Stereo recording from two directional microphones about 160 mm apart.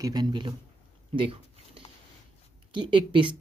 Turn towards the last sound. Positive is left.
turn(degrees=-30)  # may be behind; listen again after turning